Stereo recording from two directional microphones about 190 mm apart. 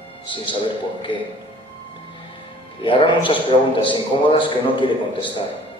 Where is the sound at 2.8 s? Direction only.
25° left (ahead or behind).